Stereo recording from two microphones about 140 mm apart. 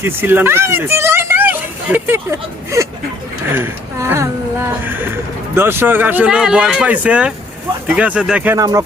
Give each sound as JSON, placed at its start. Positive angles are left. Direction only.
{"t": 0.0, "sound": "speech", "side_deg": -15}
{"t": 8.5, "sound": "speech", "side_deg": -25}